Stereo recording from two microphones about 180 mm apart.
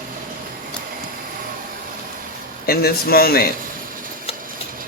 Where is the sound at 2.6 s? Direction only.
55° left (ahead or behind).